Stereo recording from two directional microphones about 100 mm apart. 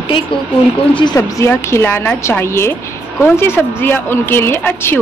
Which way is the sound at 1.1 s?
30° left (ahead or behind).